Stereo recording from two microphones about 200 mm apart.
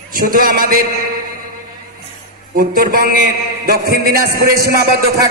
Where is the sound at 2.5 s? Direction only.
45° right (ahead or behind).